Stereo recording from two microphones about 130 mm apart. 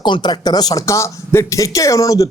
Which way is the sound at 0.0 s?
35° left (ahead or behind).